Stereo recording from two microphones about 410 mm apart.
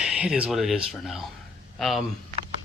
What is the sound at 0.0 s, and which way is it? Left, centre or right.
Speech, centre.